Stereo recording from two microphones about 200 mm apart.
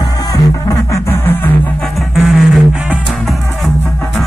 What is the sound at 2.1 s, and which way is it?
Music, centre (ahead or behind).